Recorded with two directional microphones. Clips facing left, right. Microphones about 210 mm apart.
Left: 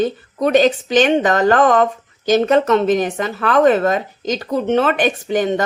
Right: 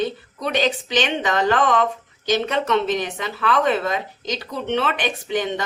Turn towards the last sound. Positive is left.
turn(degrees=45)  # may be behind; listen again after turning